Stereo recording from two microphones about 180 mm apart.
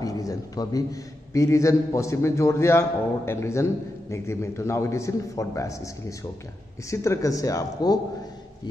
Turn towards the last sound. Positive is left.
turn(degrees=20)  # may be behind; listen again after turning